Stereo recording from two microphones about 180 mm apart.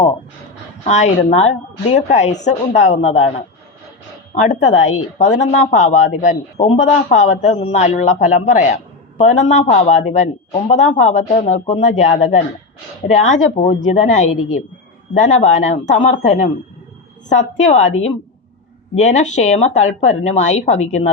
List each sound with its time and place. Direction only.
0.9 s a woman's voice: 40° left (ahead or behind)
4.4 s a woman's voice: 40° left (ahead or behind)
17.7 s a woman's voice: 40° left (ahead or behind)